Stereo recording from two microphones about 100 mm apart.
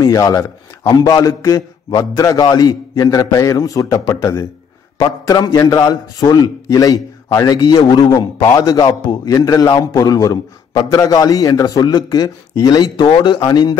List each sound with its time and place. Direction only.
0.0 s a man's voice: 35° left (ahead or behind)
4.9 s a man's voice: 45° left (ahead or behind)